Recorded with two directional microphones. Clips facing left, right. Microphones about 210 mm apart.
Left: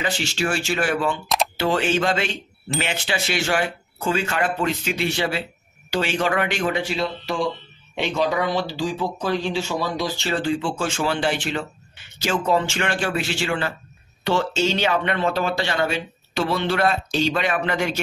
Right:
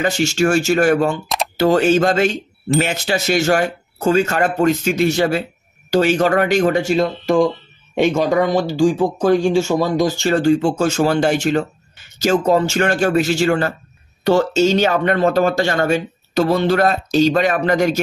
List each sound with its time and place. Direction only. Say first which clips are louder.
0.0 s speech: right 8 dB; 45° right (ahead or behind)